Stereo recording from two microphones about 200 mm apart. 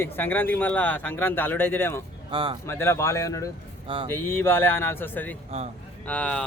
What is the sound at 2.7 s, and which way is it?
Speech, 10° left (ahead or behind).